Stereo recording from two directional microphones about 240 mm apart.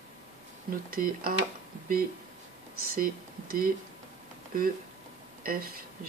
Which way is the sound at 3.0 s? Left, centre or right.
Right.